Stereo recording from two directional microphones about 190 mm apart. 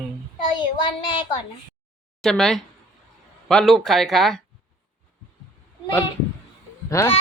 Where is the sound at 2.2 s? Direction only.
Centre (ahead or behind).